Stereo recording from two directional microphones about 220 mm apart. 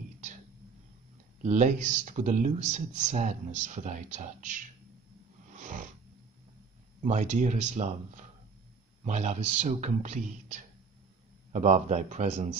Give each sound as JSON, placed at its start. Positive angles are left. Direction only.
{"t": 1.4, "sound": "speech", "side_deg": -30}
{"t": 5.5, "sound": "a sound", "side_deg": -35}
{"t": 7.1, "sound": "speech", "side_deg": -35}